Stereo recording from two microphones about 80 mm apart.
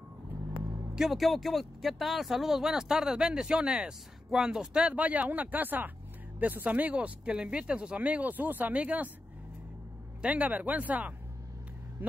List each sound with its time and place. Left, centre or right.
0.9 s speech: centre
10.2 s speech: centre